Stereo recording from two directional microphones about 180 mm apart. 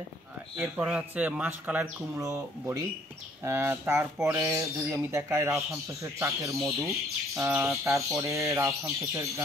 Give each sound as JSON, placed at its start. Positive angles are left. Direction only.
{"t": 0.6, "sound": "speech", "side_deg": -5}